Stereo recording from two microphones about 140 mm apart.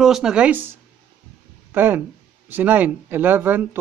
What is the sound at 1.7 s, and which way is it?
Speech, 15° right (ahead or behind).